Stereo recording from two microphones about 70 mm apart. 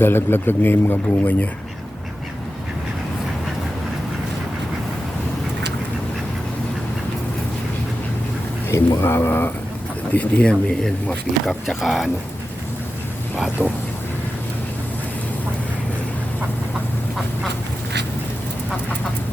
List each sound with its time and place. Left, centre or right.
0.0 s a man's voice: left
8.7 s a man's voice: left
10.1 s speech: centre
11.8 s speech: centre
13.6 s speech: centre